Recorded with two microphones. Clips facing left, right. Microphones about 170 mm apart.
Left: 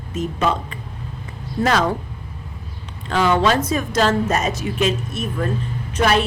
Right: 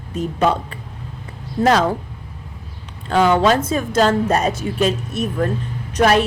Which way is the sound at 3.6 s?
30° right (ahead or behind).